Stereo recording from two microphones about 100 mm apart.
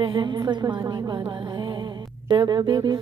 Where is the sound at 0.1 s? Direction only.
50° right (ahead or behind).